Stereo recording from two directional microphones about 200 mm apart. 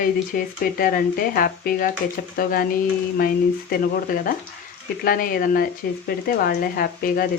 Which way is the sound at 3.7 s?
45° left (ahead or behind).